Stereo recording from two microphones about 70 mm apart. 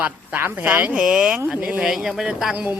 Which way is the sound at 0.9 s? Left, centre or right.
Centre.